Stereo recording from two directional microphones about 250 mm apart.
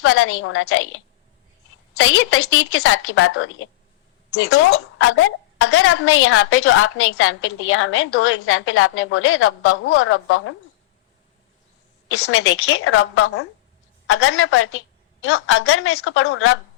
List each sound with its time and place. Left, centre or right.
0.0 s a woman's voice: left
12.0 s a woman's voice: left